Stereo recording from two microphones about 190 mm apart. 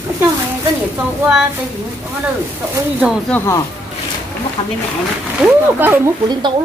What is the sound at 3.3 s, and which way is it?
Speech, 5° left (ahead or behind).